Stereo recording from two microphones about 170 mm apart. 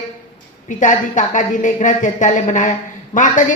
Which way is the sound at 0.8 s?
45° left (ahead or behind).